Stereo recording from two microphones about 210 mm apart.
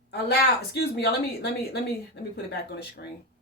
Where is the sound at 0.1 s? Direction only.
50° left (ahead or behind).